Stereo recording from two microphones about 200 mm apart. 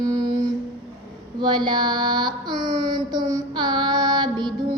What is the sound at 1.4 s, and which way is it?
Child singing, 20° right (ahead or behind).